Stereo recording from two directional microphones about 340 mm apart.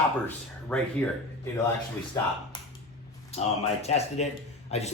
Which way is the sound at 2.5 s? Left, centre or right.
Centre.